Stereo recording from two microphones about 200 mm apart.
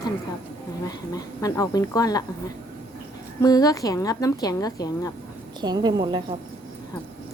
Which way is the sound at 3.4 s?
20° left (ahead or behind).